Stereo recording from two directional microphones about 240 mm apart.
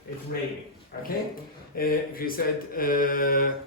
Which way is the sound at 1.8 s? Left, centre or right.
Left.